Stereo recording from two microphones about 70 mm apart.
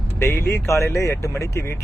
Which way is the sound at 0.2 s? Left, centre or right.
Left.